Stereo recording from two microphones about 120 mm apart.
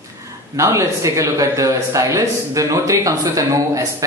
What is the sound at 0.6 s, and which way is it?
Speech, 25° right (ahead or behind).